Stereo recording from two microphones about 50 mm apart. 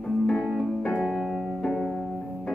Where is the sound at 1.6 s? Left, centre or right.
Centre.